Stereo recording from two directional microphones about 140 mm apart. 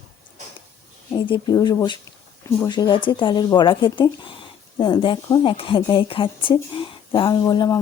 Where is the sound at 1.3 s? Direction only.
30° left (ahead or behind).